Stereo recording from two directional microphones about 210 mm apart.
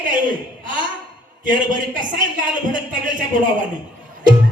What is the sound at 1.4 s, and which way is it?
A man's voice, 40° right (ahead or behind).